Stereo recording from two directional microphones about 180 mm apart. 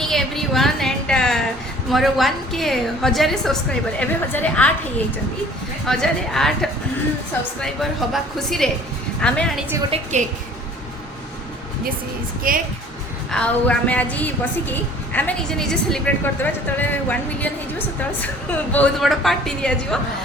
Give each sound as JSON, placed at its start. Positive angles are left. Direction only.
{"t": 0.0, "sound": "a sound", "side_deg": 0}
{"t": 1.9, "sound": "a woman's voice", "side_deg": 0}
{"t": 5.8, "sound": "a woman's voice", "side_deg": 0}
{"t": 9.9, "sound": "a woman's voice", "side_deg": -40}
{"t": 12.4, "sound": "speech", "side_deg": -50}
{"t": 13.3, "sound": "a woman's voice", "side_deg": 5}